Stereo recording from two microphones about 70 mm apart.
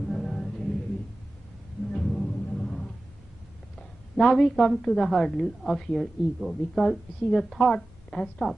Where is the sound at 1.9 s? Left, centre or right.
Centre.